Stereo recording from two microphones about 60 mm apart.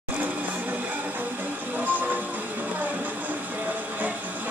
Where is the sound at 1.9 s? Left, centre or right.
Right.